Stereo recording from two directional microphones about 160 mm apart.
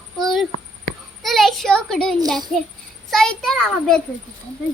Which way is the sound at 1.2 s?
Centre (ahead or behind).